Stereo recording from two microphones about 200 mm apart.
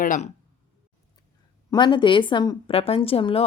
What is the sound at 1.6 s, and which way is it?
Speech, 20° left (ahead or behind).